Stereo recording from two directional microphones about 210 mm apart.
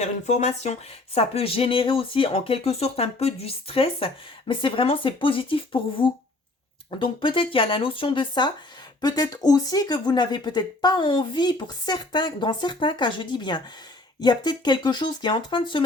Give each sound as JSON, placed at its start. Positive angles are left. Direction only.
{"t": 0.0, "sound": "speech", "side_deg": 35}